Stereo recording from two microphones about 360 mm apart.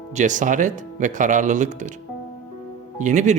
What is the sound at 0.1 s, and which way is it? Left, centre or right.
Speech, centre.